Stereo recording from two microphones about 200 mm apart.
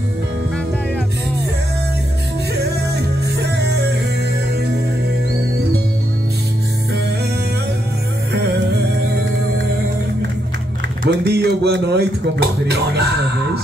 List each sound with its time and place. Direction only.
3.3 s music: 55° right (ahead or behind)
11.1 s music: 55° right (ahead or behind)